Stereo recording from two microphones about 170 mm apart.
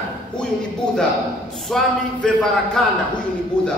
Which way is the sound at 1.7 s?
5° left (ahead or behind).